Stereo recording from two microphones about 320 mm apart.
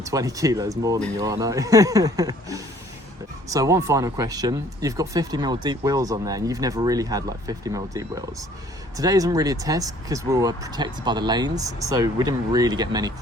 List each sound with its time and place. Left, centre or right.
0.0 s speech: centre